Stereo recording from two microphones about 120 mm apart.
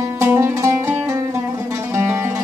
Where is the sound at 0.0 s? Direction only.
20° right (ahead or behind).